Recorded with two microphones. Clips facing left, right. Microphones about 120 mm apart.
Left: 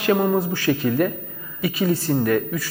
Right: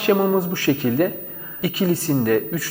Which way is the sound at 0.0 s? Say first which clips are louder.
Right 2 dB; 50° right (ahead or behind).